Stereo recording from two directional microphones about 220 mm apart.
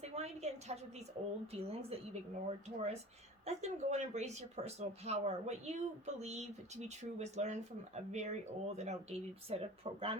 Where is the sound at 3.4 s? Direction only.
30° right (ahead or behind).